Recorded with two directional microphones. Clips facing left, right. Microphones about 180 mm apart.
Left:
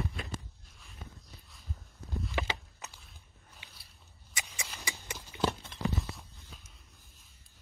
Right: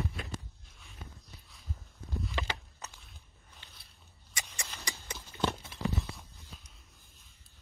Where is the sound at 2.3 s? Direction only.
20° left (ahead or behind).